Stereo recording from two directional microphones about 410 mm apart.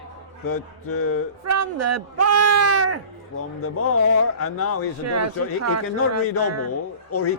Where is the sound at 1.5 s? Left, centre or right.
Right.